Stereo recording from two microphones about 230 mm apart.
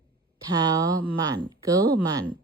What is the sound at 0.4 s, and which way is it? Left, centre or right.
Speech, centre.